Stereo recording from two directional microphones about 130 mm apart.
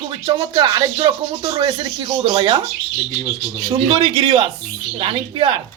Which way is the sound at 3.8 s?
35° right (ahead or behind).